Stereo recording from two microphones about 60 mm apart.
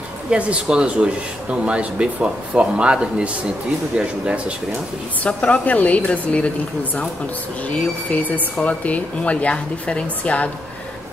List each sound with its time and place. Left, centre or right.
0.3 s speech: right
5.2 s a woman's voice: left